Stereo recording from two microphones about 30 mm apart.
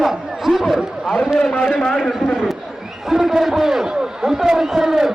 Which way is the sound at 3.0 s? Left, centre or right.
Centre.